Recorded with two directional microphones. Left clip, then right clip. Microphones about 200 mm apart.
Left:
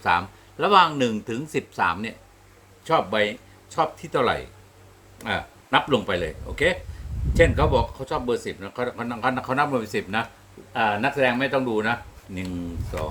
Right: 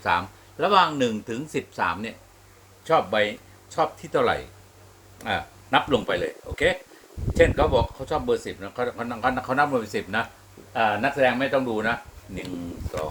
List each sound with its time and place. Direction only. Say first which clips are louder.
0.0 s speech: left 2 dB; 30° left (ahead or behind)